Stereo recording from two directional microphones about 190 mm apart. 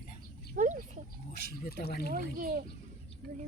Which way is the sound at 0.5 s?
45° right (ahead or behind).